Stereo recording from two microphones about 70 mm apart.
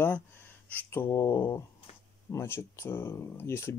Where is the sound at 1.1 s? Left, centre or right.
Left.